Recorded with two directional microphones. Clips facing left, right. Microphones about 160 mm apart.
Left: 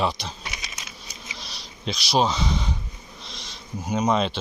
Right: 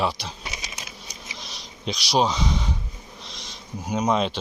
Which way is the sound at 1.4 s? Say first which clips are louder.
Even; 15° right (ahead or behind).